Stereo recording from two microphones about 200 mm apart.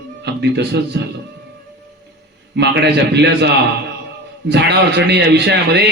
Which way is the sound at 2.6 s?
60° right (ahead or behind).